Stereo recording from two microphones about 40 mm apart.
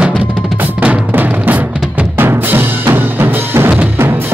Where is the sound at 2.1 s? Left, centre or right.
Right.